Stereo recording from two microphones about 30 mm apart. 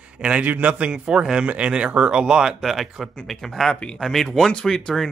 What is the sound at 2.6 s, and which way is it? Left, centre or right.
Speech, centre.